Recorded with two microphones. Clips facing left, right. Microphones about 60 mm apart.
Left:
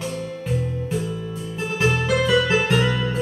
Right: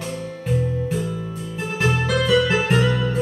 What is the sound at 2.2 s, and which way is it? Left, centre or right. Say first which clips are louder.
Music: right 2 dB; left.